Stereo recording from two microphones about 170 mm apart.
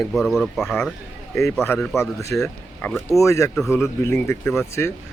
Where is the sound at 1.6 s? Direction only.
15° left (ahead or behind).